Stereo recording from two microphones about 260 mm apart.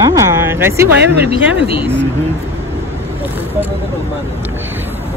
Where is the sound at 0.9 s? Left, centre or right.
Right.